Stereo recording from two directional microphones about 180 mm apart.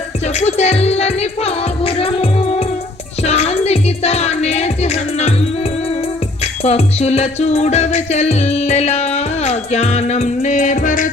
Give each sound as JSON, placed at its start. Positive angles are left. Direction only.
{"t": 0.3, "sound": "music", "side_deg": 35}
{"t": 6.4, "sound": "music", "side_deg": 35}